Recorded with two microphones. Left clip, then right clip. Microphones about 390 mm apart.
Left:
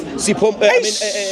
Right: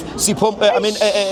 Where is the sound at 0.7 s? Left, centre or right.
Left.